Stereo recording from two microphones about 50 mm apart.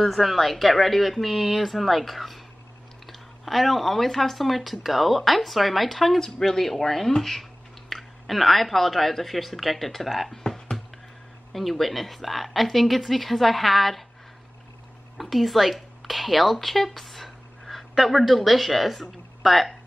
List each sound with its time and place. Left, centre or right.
0.0 s speech: centre
15.1 s speech: centre